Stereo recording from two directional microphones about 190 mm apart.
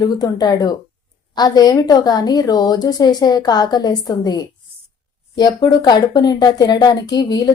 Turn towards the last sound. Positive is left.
turn(degrees=20)  # may be behind; listen again after turning